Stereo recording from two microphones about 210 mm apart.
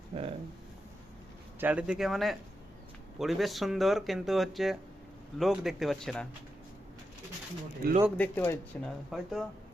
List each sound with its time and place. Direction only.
0.1 s a sound: 30° right (ahead or behind)
1.5 s speech: 5° right (ahead or behind)
7.8 s speech: 45° right (ahead or behind)
8.2 s speech: 10° left (ahead or behind)
9.0 s speech: centre (ahead or behind)